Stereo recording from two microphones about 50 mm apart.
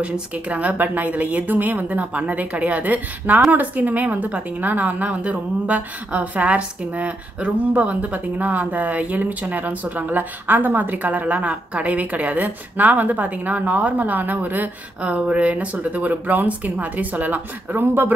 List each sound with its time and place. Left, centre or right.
0.5 s a woman's voice: right
15.0 s a woman's voice: right